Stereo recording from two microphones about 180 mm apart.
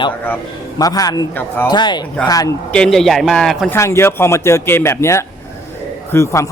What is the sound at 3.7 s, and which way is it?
Speech, 15° left (ahead or behind).